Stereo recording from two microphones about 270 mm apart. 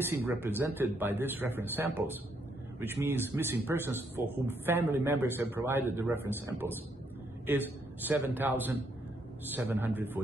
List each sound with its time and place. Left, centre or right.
0.4 s a man's voice: centre